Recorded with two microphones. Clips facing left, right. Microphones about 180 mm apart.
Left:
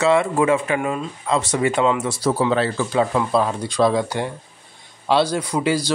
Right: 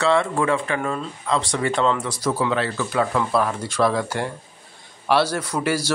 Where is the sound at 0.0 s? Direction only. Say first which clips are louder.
Left 3 dB; 20° left (ahead or behind).